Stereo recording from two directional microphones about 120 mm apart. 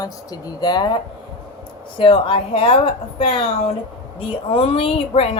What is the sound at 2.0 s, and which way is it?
Speech, 45° left (ahead or behind).